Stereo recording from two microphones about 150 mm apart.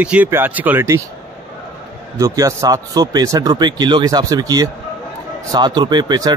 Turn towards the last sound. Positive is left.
turn(degrees=-25)  # may be behind; listen again after turning